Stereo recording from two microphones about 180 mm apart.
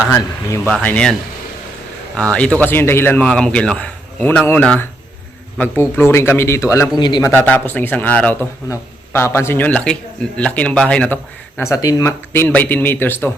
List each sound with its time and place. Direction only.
0.1 s speech: 15° left (ahead or behind)
2.3 s speech: 5° left (ahead or behind); by 7.3 s 25° left (ahead or behind)
7.3 s speech: 10° left (ahead or behind)